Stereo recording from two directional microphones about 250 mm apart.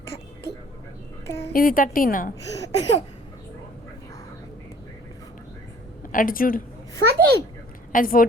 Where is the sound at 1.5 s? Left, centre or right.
Left.